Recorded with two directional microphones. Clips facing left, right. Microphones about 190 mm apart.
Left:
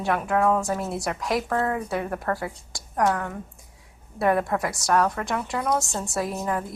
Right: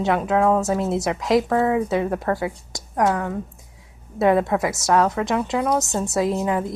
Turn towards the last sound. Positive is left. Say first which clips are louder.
# right 6 dB
turn(degrees=-20)  # may be behind; listen again after turning